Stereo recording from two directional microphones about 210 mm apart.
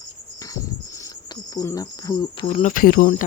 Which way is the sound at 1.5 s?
15° left (ahead or behind).